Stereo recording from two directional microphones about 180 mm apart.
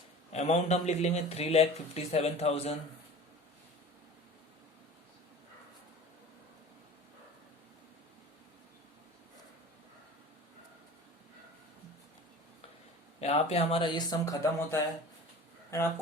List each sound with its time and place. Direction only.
0.3 s speech: 35° left (ahead or behind)
13.1 s speech: 35° left (ahead or behind); by 14.8 s 20° left (ahead or behind)